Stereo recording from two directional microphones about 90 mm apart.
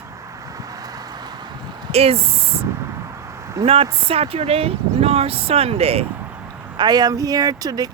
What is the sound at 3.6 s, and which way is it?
Speech, 90° right.